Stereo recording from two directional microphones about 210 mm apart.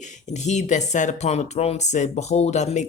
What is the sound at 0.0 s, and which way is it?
Speech, 35° left (ahead or behind).